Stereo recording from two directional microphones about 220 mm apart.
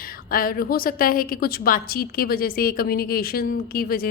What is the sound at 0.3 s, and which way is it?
A woman's voice, 40° left (ahead or behind).